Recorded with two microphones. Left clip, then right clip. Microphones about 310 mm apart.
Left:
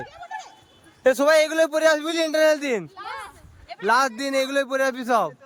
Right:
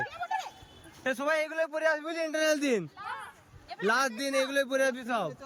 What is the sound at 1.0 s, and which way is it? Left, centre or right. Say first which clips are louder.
A man's voice: left 12 dB; centre.